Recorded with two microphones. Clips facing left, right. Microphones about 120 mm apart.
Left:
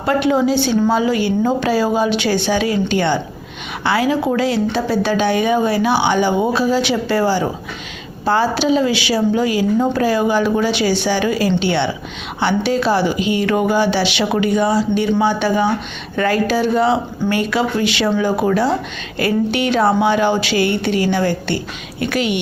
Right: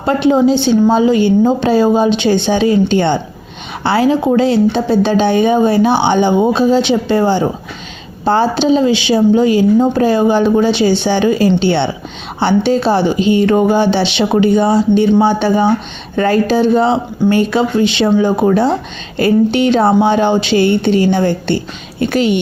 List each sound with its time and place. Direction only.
0.0 s speech: 25° right (ahead or behind)